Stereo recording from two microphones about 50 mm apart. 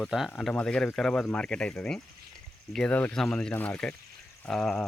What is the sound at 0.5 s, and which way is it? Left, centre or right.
Speech, centre.